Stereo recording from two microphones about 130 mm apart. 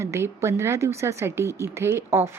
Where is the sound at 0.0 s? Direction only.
20° right (ahead or behind).